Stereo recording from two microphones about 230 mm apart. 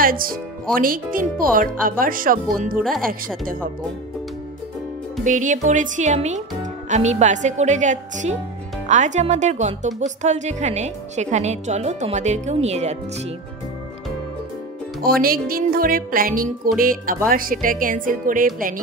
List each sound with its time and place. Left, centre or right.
0.0 s speech: right
5.2 s speech: right
15.0 s speech: right